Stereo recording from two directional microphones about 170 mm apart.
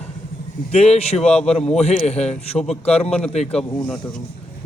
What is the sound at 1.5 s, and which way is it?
Speech, 35° left (ahead or behind).